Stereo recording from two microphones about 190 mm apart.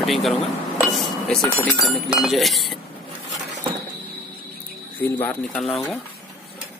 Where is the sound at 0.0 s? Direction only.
Centre (ahead or behind).